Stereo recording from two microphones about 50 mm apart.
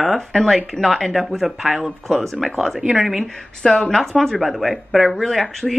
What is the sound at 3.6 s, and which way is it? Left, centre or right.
Speech, centre.